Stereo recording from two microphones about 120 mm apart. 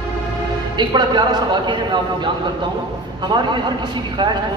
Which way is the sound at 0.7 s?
40° right (ahead or behind).